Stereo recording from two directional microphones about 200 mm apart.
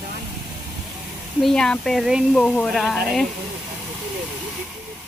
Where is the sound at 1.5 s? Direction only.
5° left (ahead or behind).